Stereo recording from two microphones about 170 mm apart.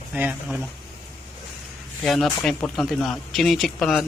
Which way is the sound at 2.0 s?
Centre (ahead or behind).